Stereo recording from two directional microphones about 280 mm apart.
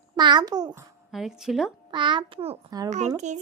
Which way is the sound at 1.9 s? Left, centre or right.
Centre.